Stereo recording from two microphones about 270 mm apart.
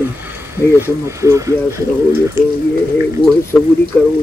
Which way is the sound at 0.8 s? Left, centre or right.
Centre.